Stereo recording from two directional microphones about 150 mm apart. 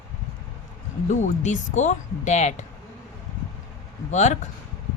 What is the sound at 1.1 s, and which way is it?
Speech, 55° left (ahead or behind).